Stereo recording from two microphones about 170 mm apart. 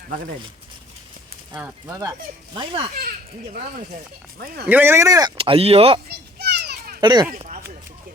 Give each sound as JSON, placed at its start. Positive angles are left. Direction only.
{"t": 1.5, "sound": "speech", "side_deg": -10}
{"t": 2.6, "sound": "speech", "side_deg": -30}
{"t": 3.1, "sound": "speech", "side_deg": -55}
{"t": 4.6, "sound": "speech", "side_deg": -10}
{"t": 5.4, "sound": "speech", "side_deg": -35}
{"t": 6.1, "sound": "children playing", "side_deg": -75}
{"t": 7.0, "sound": "speech", "side_deg": -25}
{"t": 7.3, "sound": "a sound", "side_deg": -45}